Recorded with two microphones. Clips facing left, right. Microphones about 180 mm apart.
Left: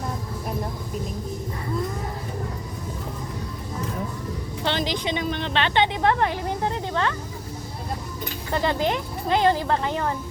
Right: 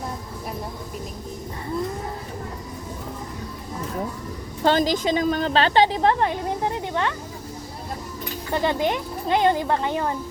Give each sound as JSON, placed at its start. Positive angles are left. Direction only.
{"t": 4.6, "sound": "a woman's voice", "side_deg": -45}
{"t": 8.5, "sound": "speech", "side_deg": -20}